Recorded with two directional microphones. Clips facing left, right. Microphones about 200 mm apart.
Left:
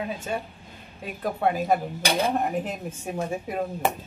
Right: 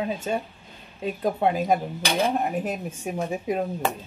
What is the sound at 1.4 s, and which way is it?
Speech, 20° right (ahead or behind).